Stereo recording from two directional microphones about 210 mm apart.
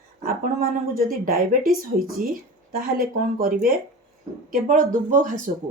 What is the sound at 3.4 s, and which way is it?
Speech, 40° right (ahead or behind).